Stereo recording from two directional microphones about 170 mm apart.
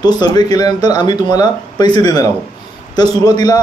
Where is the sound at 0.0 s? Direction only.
25° left (ahead or behind).